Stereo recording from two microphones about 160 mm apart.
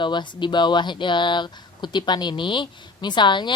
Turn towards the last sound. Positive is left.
turn(degrees=30)  # may be behind; listen again after turning